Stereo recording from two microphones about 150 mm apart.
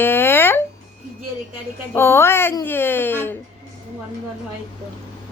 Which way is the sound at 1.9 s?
15° left (ahead or behind).